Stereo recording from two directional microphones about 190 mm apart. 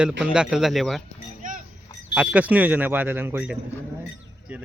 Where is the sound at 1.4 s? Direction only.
45° right (ahead or behind).